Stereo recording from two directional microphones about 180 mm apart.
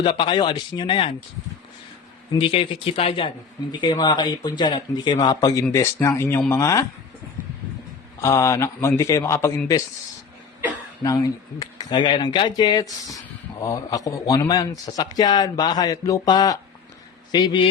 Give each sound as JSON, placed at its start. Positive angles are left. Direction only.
{"t": 0.0, "sound": "speech", "side_deg": 25}
{"t": 2.3, "sound": "a man's voice", "side_deg": 30}
{"t": 8.2, "sound": "a man's voice", "side_deg": 15}
{"t": 11.0, "sound": "speech", "side_deg": 20}